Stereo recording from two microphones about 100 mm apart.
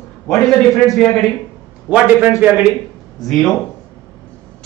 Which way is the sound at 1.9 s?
20° right (ahead or behind).